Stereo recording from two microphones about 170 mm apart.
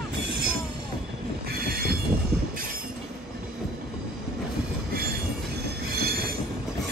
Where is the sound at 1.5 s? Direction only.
65° right (ahead or behind).